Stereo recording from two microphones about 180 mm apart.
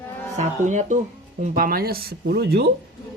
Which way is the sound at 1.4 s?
55° right (ahead or behind).